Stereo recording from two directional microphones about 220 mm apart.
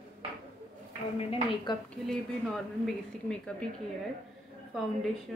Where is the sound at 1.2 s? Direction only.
25° left (ahead or behind).